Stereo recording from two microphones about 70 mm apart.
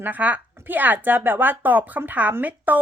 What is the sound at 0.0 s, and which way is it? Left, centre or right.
A woman's voice, right.